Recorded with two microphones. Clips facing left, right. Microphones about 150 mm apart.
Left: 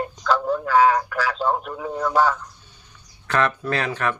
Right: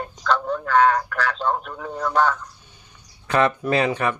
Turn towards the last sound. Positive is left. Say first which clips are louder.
# right 3 dB
turn(degrees=-15)  # may be behind; listen again after turning